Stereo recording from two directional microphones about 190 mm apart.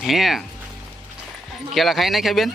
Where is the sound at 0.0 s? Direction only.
Centre (ahead or behind).